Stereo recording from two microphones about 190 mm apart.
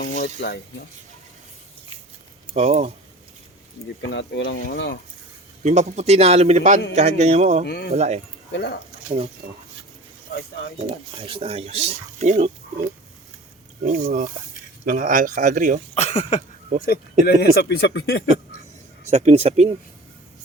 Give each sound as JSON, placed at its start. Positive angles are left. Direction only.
{"t": 0.0, "sound": "speech", "side_deg": 50}
{"t": 2.5, "sound": "speech", "side_deg": -35}
{"t": 4.1, "sound": "speech", "side_deg": 70}
{"t": 5.6, "sound": "speech", "side_deg": -35}
{"t": 7.6, "sound": "speech", "side_deg": 60}
{"t": 7.9, "sound": "speech", "side_deg": -35}
{"t": 8.5, "sound": "speech", "side_deg": 60}
{"t": 9.0, "sound": "speech", "side_deg": -30}
{"t": 10.8, "sound": "speech", "side_deg": -30}
{"t": 13.8, "sound": "speech", "side_deg": -40}
{"t": 16.0, "sound": "a sound", "side_deg": 35}
{"t": 16.8, "sound": "speech", "side_deg": 55}
{"t": 19.1, "sound": "speech", "side_deg": -35}